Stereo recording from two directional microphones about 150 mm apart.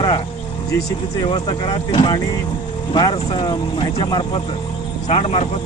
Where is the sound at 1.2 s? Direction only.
35° left (ahead or behind).